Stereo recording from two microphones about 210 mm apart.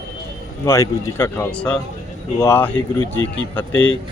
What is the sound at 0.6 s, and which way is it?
Speech, 15° left (ahead or behind).